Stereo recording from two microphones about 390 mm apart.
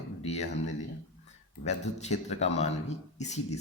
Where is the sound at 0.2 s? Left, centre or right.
Centre.